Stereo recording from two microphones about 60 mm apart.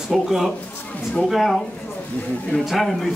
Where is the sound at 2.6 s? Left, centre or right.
Centre.